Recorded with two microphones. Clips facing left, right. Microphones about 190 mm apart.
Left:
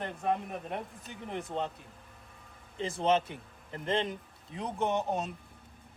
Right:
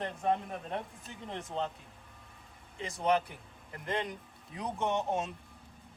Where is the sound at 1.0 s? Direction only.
Centre (ahead or behind).